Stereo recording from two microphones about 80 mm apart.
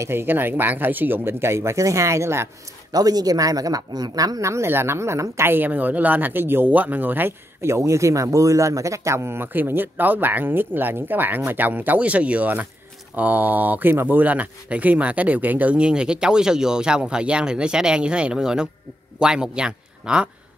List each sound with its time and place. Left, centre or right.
0.0 s speech: right
2.9 s speech: right; by 20.2 s centre